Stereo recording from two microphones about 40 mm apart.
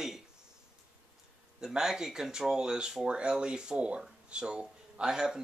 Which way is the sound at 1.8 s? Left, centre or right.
Centre.